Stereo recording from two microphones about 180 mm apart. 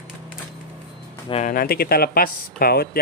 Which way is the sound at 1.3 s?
35° left (ahead or behind).